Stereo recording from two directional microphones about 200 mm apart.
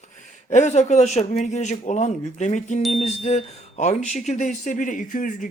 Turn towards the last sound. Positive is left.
turn(degrees=40)  # may be behind; listen again after turning